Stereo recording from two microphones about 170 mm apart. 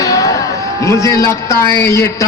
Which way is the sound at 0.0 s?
20° left (ahead or behind).